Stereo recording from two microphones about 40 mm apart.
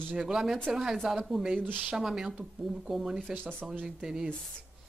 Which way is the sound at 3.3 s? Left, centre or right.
Right.